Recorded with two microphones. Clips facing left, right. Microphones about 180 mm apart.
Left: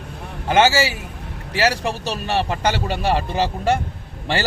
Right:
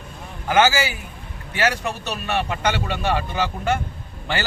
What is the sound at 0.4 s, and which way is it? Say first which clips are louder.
A man's voice: left 2 dB; 30° left (ahead or behind).